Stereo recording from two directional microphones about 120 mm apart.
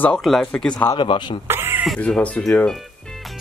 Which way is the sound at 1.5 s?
20° right (ahead or behind).